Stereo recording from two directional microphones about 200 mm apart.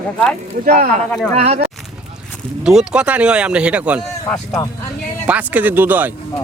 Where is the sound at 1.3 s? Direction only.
30° right (ahead or behind).